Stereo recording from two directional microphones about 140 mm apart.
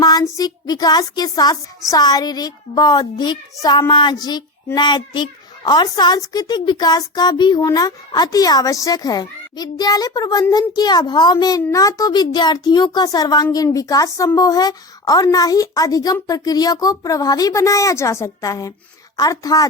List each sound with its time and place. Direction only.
0.0 s speech: 25° left (ahead or behind)